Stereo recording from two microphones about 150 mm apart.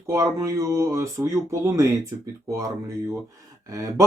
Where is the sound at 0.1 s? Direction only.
20° right (ahead or behind).